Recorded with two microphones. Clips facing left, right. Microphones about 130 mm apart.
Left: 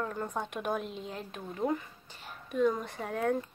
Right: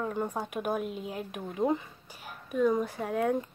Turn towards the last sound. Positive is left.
turn(degrees=-10)  # may be behind; listen again after turning